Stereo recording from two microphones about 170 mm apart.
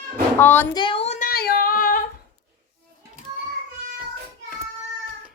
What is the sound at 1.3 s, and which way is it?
Singing, 60° left (ahead or behind).